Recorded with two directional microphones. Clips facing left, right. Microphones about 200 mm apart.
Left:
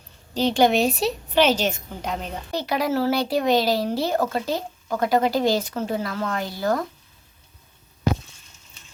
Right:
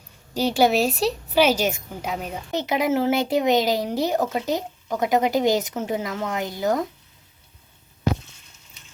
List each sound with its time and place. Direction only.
0.3 s a woman's voice: 10° right (ahead or behind)
2.5 s speech: 20° right (ahead or behind)